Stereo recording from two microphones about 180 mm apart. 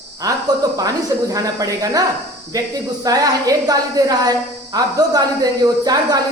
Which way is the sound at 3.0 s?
20° right (ahead or behind).